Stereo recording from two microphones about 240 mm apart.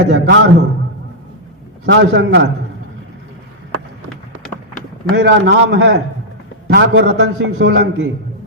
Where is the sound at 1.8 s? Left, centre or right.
Right.